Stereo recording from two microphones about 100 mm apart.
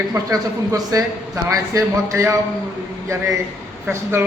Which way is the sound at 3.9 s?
25° right (ahead or behind).